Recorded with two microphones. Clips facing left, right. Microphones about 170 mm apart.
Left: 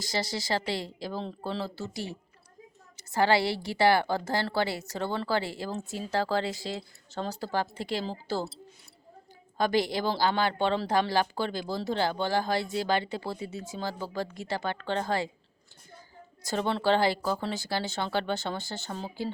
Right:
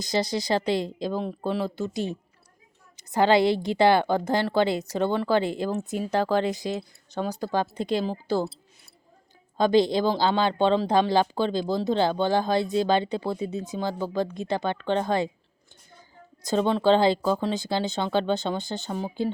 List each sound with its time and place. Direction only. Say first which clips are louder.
0.0 s a woman's voice: right 6 dB; 20° right (ahead or behind)
9.6 s a woman's voice: right 6 dB; 20° right (ahead or behind)
16.5 s a woman's voice: right 6 dB; 15° right (ahead or behind)